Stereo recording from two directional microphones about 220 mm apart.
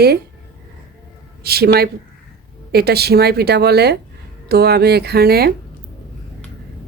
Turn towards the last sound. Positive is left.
turn(degrees=-45)  # may be behind; listen again after turning